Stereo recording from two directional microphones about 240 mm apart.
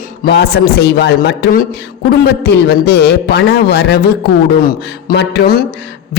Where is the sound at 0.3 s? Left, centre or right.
Left.